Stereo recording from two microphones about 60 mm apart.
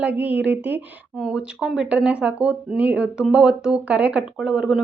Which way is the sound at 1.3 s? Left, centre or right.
Centre.